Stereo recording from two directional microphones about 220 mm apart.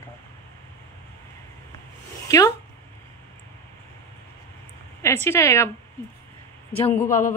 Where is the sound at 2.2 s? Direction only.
15° left (ahead or behind).